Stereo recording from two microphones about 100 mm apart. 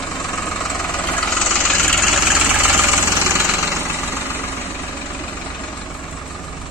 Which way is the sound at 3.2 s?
25° right (ahead or behind).